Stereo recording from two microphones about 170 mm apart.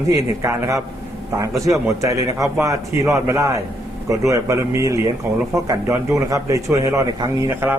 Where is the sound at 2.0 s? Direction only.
20° right (ahead or behind).